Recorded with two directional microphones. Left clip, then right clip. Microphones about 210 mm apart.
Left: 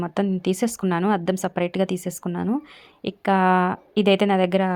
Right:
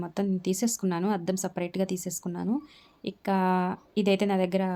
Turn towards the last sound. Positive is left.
turn(degrees=20)  # may be behind; listen again after turning